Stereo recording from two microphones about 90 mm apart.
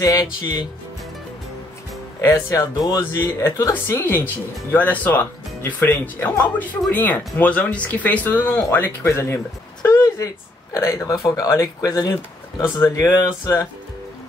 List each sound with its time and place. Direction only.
0.0 s speech: 45° left (ahead or behind)
3.0 s speech: 35° left (ahead or behind)